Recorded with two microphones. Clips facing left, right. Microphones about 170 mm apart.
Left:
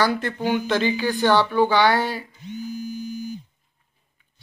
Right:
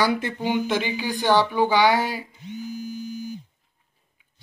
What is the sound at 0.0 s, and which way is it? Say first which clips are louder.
A man's voice: left 1 dB; 15° right (ahead or behind).